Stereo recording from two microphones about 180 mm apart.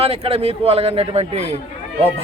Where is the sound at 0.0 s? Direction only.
35° right (ahead or behind).